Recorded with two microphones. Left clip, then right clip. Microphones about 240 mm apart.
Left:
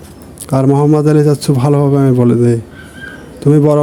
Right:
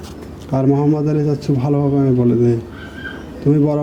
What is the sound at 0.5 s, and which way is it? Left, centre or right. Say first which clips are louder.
A man's voice: left 5 dB; left.